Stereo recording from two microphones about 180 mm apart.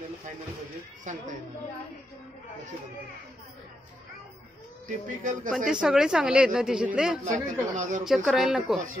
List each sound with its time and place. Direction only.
1.1 s a woman's voice: 40° right (ahead or behind)
4.8 s speech: 45° right (ahead or behind)
5.7 s a woman's voice: 5° right (ahead or behind)
7.7 s speech: 45° right (ahead or behind)
8.0 s a woman's voice: centre (ahead or behind)